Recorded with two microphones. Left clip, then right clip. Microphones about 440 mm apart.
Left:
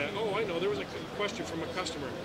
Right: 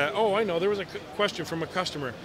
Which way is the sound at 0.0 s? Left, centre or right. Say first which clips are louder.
Right 7 dB; right.